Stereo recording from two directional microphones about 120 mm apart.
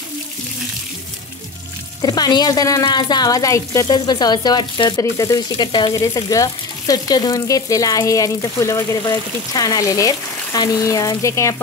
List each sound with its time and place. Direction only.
2.0 s speech: 35° left (ahead or behind)